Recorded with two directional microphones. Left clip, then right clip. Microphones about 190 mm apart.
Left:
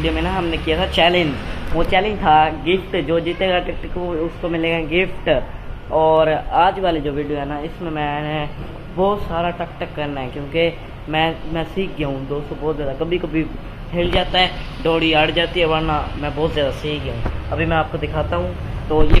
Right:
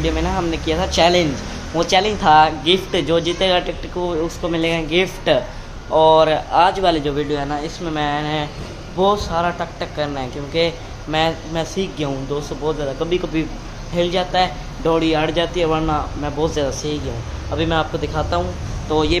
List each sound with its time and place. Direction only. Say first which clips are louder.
0.0 s speech: even; 10° right (ahead or behind)
1.8 s speech: right 1 dB; 25° right (ahead or behind)